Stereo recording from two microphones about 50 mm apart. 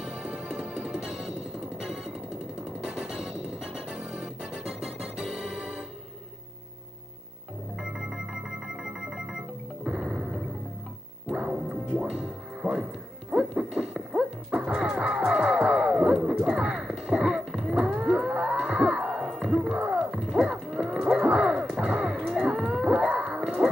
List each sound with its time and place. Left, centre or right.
0.0 s music: centre
7.7 s music: centre
19.2 s livestock: centre
21.8 s horse: centre
22.2 s cattle: centre
22.5 s whale vocalization: centre
22.8 s a sound: centre